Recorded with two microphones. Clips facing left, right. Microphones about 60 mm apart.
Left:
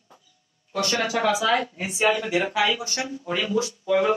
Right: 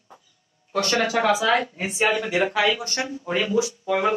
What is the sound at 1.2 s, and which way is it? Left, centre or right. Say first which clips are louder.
Speech: right 1 dB; right.